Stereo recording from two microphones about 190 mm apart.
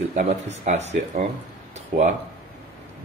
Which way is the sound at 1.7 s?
35° right (ahead or behind).